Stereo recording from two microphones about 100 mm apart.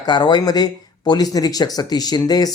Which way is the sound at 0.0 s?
50° left (ahead or behind).